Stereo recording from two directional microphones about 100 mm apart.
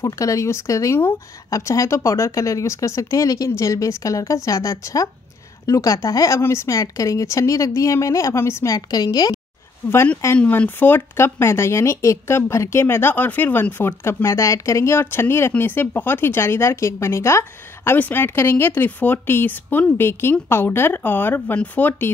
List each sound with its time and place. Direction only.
0.0 s speech: 35° left (ahead or behind)
10.4 s speech: 15° left (ahead or behind)